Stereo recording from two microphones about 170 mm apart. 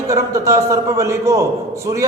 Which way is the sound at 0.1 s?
15° right (ahead or behind).